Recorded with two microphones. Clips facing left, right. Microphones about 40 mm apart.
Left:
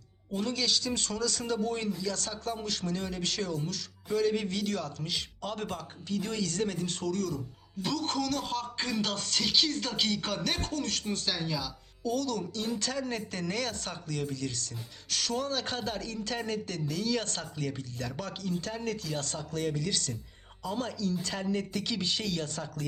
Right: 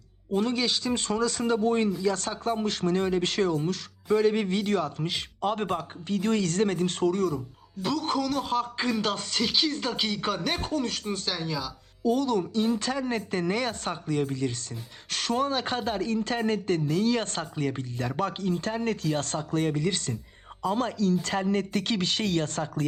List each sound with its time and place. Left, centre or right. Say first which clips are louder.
0.3 s speech: right 5 dB; right
7.1 s speech: right 6 dB; right
7.8 s speech: right 4 dB; centre
12.0 s speech: right 7 dB; right